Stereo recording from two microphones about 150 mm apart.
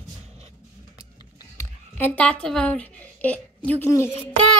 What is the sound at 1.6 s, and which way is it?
A woman's voice, 15° left (ahead or behind).